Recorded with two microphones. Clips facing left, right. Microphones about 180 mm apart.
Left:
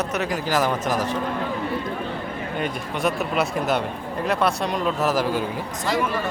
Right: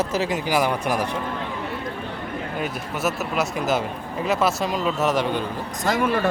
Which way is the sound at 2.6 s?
Centre (ahead or behind).